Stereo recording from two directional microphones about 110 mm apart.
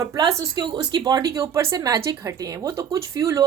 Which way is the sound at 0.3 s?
40° right (ahead or behind).